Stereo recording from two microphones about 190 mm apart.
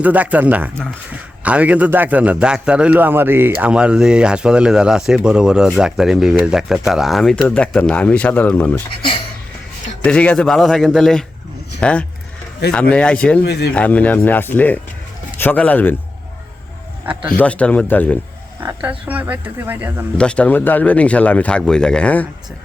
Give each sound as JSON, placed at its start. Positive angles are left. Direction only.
{"t": 0.0, "sound": "a man's voice", "side_deg": -10}
{"t": 10.0, "sound": "speech", "side_deg": 5}
{"t": 13.4, "sound": "speech", "side_deg": 60}
{"t": 13.7, "sound": "speech", "side_deg": 5}
{"t": 17.3, "sound": "speech", "side_deg": 5}
{"t": 18.6, "sound": "a man's voice", "side_deg": -10}
{"t": 20.1, "sound": "speech", "side_deg": 5}